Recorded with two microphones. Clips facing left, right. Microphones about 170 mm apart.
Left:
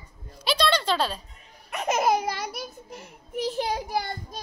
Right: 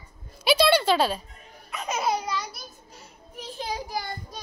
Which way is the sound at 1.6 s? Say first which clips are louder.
Left 4 dB; 60° left (ahead or behind).